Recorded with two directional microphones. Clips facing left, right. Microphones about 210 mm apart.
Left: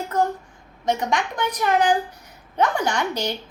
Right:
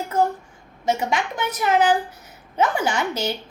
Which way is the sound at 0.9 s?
5° right (ahead or behind).